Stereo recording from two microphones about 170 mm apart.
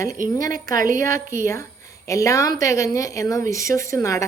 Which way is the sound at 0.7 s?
50° right (ahead or behind).